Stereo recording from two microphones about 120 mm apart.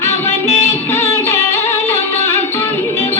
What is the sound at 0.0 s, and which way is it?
Music, 20° left (ahead or behind).